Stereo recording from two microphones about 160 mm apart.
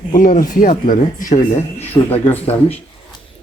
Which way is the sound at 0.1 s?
60° left (ahead or behind).